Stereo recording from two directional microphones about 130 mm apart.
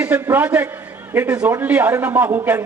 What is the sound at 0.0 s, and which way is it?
A man's voice, 15° right (ahead or behind).